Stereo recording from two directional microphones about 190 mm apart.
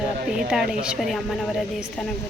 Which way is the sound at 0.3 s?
5° right (ahead or behind).